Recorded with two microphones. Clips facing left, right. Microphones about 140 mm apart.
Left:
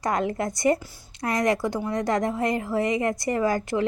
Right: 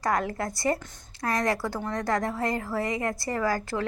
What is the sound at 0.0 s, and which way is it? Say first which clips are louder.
A woman's voice: left 2 dB; 20° left (ahead or behind).